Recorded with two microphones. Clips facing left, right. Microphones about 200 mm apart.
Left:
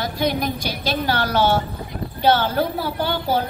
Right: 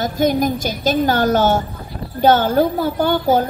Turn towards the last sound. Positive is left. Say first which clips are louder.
# right 6 dB
turn(degrees=-50)  # may be behind; listen again after turning